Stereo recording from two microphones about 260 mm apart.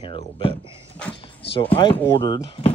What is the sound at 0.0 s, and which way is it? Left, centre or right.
Speech, centre.